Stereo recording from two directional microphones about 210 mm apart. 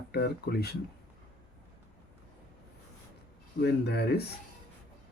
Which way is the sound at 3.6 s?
50° left (ahead or behind).